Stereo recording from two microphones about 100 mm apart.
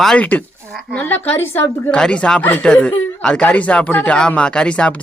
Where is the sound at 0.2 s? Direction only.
15° left (ahead or behind).